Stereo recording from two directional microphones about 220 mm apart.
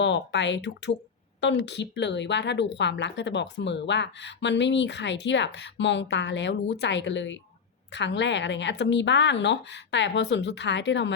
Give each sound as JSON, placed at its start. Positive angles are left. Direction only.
{"t": 0.0, "sound": "a woman's voice", "side_deg": 55}